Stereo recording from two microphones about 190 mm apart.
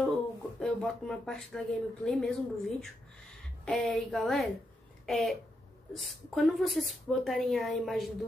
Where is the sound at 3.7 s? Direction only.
Centre (ahead or behind).